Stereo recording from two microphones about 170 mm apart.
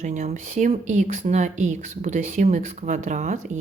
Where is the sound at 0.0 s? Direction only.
45° right (ahead or behind).